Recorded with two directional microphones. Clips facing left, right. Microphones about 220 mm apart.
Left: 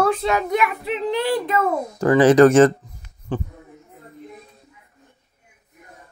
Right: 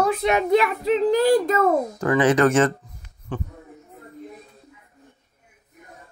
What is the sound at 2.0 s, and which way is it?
Speech, 35° left (ahead or behind).